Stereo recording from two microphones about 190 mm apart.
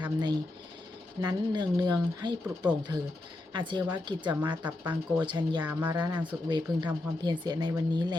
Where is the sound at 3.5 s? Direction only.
25° right (ahead or behind).